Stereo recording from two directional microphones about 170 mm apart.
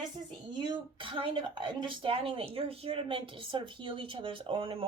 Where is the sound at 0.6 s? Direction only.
30° right (ahead or behind).